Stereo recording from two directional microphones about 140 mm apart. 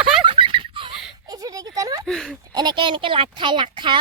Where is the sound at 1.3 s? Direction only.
25° right (ahead or behind).